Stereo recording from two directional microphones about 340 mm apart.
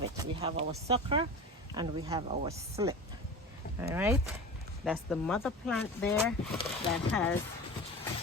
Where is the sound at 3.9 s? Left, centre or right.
Centre.